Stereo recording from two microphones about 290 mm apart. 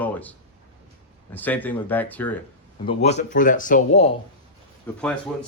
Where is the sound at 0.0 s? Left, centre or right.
Centre.